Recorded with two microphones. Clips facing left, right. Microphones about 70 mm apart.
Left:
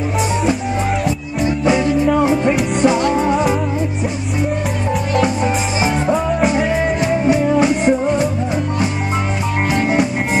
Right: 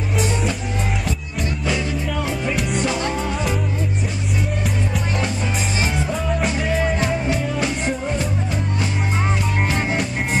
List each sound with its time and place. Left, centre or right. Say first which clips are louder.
1.4 s music: left 9 dB; left
6.1 s music: left 7 dB; left
9.7 s music: left 6 dB; centre